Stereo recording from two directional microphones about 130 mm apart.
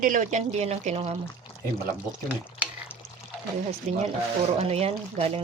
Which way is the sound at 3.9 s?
60° right (ahead or behind).